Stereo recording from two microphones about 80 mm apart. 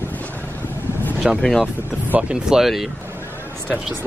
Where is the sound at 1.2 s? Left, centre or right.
Centre.